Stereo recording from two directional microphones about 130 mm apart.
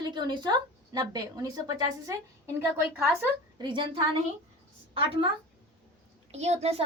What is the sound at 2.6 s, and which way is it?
Speech, 15° right (ahead or behind).